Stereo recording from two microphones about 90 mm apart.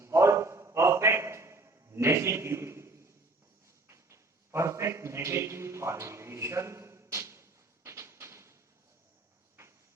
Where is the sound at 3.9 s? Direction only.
35° right (ahead or behind).